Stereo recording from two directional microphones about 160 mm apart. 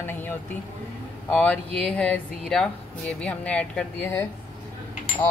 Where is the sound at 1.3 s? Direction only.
10° left (ahead or behind).